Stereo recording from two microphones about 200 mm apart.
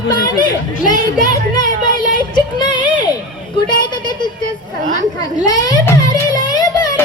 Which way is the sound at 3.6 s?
20° left (ahead or behind).